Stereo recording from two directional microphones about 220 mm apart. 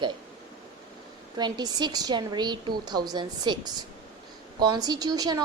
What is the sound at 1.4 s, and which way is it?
A woman's voice, 20° right (ahead or behind).